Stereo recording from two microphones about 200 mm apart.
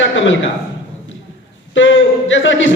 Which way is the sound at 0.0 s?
70° left (ahead or behind).